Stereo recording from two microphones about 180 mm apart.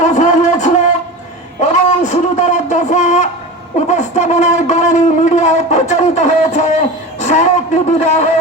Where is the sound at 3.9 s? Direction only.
40° left (ahead or behind).